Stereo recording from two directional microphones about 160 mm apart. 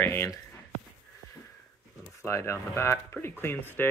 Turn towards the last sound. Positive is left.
turn(degrees=15)  # may be behind; listen again after turning